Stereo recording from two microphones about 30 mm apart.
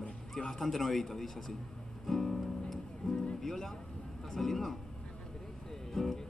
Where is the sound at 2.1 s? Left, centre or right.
Centre.